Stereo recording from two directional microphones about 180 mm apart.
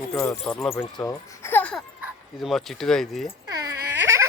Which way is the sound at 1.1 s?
15° left (ahead or behind).